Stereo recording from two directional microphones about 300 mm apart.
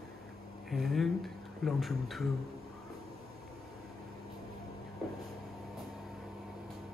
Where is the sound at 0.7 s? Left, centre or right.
Centre.